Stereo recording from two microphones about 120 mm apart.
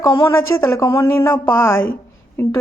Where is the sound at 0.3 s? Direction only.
25° left (ahead or behind).